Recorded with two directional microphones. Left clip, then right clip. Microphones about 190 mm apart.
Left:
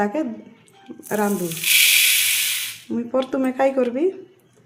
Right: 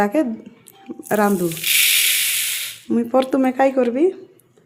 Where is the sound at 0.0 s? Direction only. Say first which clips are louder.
Right 4 dB; 40° right (ahead or behind).